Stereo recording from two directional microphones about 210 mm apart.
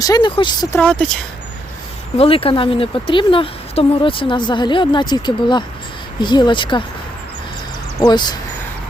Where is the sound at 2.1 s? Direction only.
25° left (ahead or behind).